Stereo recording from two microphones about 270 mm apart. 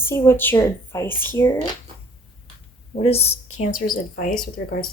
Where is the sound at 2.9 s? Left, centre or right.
Left.